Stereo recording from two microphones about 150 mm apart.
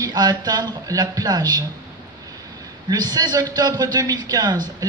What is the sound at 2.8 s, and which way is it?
Speech, 25° right (ahead or behind).